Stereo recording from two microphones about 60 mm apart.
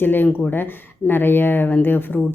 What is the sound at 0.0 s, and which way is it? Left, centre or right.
Speech, left.